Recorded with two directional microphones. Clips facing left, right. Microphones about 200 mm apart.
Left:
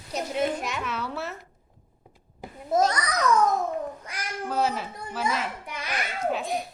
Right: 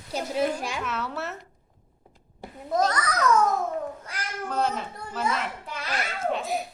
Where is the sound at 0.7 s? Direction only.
Centre (ahead or behind).